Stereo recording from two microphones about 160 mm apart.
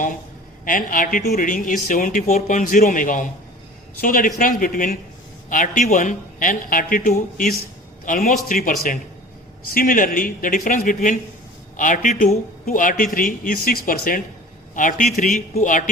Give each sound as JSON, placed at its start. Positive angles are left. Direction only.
{"t": 0.6, "sound": "speech", "side_deg": 60}
{"t": 14.8, "sound": "speech", "side_deg": 55}